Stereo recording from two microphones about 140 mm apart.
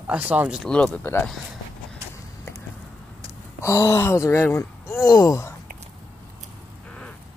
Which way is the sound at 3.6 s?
20° left (ahead or behind).